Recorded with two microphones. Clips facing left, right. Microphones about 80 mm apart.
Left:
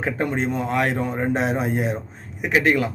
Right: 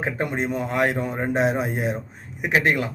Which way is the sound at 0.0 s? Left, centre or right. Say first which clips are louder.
Left 2 dB; centre.